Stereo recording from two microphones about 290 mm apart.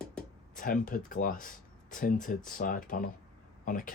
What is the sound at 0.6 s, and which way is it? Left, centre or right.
Speech, left.